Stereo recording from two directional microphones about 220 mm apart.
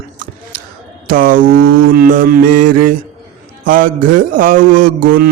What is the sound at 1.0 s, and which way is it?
A man's voice, 40° right (ahead or behind).